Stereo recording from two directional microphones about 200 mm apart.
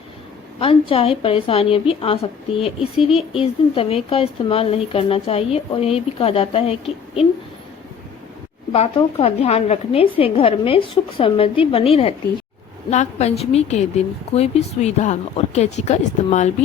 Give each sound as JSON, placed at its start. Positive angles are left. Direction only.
{"t": 0.6, "sound": "a woman's voice", "side_deg": 25}
{"t": 8.7, "sound": "a woman's voice", "side_deg": 30}